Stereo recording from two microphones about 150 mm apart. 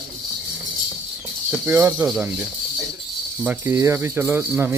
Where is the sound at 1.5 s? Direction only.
10° right (ahead or behind).